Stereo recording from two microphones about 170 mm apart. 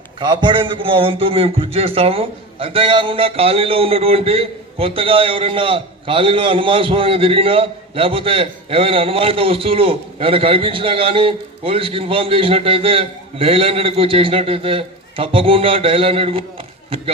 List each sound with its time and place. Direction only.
0.2 s a man's voice: 25° right (ahead or behind)